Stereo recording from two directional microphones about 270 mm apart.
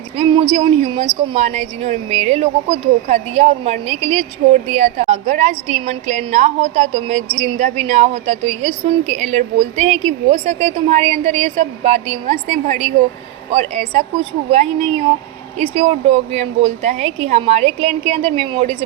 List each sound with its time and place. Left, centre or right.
0.2 s a woman's voice: centre